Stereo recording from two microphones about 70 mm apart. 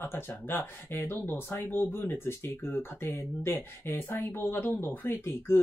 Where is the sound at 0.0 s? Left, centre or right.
Left.